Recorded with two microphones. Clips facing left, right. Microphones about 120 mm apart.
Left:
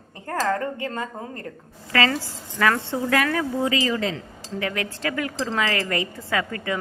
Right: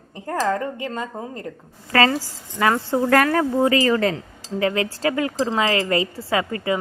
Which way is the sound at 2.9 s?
50° right (ahead or behind).